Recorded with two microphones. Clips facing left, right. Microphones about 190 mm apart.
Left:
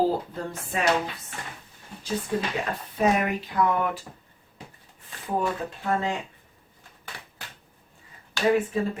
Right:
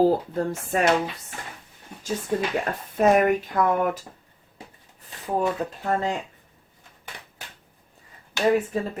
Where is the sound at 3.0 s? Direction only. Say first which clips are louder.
Right 5 dB; 50° right (ahead or behind).